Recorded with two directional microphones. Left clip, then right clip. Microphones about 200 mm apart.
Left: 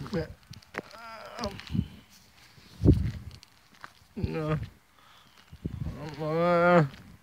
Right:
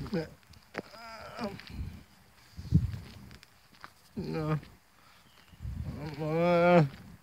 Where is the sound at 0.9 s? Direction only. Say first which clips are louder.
Left 2 dB; 5° right (ahead or behind).